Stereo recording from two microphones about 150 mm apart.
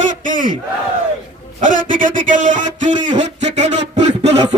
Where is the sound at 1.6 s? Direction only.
60° right (ahead or behind).